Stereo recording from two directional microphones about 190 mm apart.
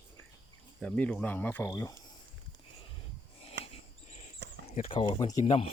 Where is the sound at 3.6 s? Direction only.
65° right (ahead or behind).